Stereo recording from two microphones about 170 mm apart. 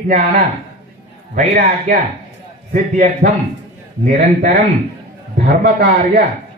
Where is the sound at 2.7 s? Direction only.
45° right (ahead or behind).